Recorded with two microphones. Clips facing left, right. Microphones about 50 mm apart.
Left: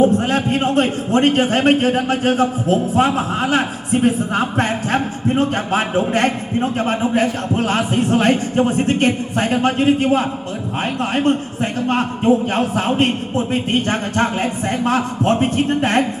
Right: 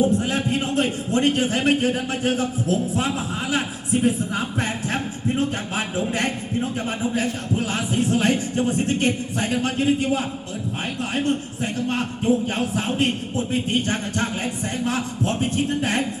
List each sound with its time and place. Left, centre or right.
0.0 s a man's voice: left